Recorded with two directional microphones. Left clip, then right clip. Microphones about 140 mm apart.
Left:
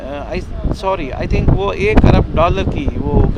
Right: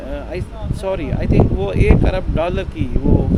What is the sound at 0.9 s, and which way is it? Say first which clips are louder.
Speech: left 2 dB; 20° right (ahead or behind).